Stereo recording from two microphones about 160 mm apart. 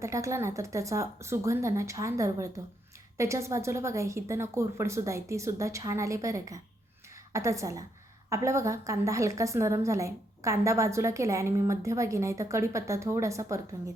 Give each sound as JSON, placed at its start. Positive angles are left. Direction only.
{"t": 0.0, "sound": "a woman's voice", "side_deg": -20}